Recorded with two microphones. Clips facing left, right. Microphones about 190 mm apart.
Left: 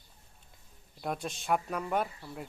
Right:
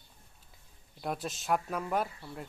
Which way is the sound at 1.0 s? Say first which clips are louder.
Even; centre (ahead or behind).